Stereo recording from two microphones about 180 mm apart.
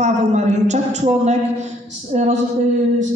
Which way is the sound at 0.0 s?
40° right (ahead or behind).